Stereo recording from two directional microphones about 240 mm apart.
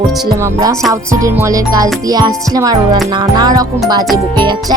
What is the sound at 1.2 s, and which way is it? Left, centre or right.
Music, centre.